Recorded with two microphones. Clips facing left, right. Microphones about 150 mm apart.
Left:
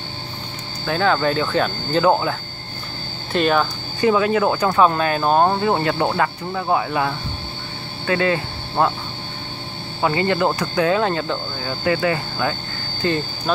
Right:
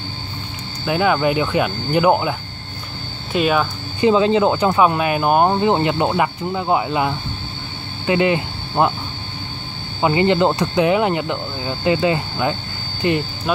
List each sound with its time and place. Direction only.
0.8 s speech: 15° right (ahead or behind)
3.3 s speech: 5° right (ahead or behind)
4.0 s speech: 20° right (ahead or behind)
4.7 s speech: 10° right (ahead or behind)
10.0 s speech: 20° right (ahead or behind)